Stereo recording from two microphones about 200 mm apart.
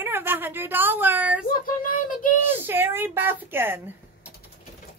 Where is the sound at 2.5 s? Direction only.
10° right (ahead or behind).